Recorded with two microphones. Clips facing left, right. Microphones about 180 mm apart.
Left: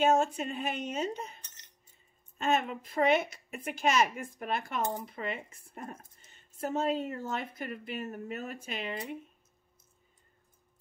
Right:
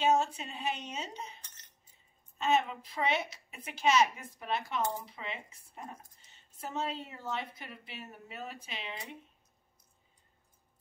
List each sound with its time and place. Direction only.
0.0 s a woman's voice: 50° left (ahead or behind)